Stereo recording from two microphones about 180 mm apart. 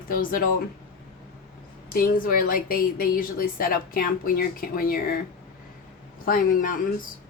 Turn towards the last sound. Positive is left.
turn(degrees=50)  # may be behind; listen again after turning